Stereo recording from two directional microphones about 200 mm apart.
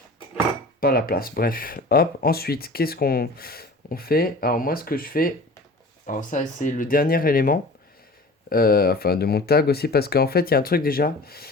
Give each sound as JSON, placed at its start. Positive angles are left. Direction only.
{"t": 0.8, "sound": "speech", "side_deg": 50}